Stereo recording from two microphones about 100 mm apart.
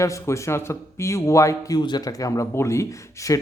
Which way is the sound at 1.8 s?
45° left (ahead or behind).